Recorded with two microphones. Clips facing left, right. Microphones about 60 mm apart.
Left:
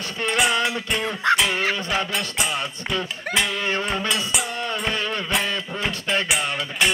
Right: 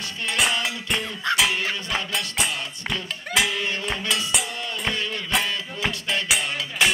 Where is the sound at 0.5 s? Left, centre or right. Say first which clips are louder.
Left 3 dB; left.